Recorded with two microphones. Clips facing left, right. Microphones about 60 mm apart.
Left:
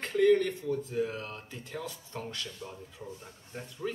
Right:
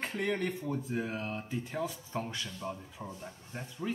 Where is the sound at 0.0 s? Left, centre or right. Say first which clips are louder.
Left 9 dB; centre.